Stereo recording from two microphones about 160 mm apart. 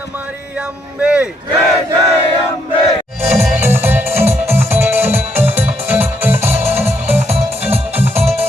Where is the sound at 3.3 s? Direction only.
15° right (ahead or behind).